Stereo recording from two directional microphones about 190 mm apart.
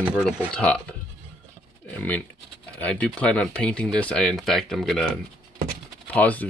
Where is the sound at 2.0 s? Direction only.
10° left (ahead or behind).